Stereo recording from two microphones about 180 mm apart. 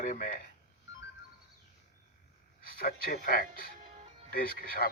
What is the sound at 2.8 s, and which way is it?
Speech, 55° left (ahead or behind).